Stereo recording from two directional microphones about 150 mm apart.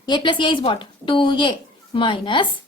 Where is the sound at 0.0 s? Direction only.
30° left (ahead or behind).